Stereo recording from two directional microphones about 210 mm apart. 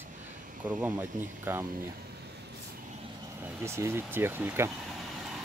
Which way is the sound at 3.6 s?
10° right (ahead or behind).